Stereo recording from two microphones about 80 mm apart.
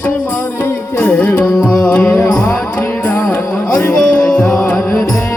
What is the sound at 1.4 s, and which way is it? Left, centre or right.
Carnatic music, centre.